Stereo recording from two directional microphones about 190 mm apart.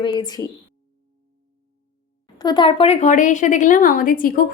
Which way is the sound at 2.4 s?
25° left (ahead or behind).